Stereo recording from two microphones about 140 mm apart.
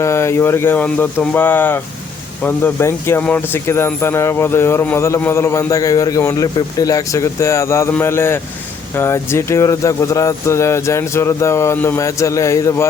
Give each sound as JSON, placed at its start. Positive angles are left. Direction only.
{"t": 0.0, "sound": "speech", "side_deg": 20}